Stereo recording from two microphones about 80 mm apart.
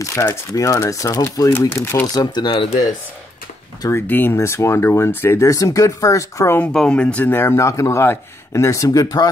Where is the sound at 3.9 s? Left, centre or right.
Left.